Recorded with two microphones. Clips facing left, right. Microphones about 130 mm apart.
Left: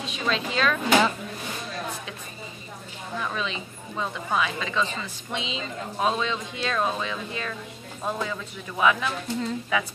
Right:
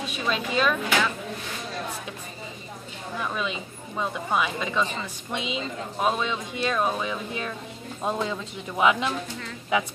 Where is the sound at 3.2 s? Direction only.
10° right (ahead or behind).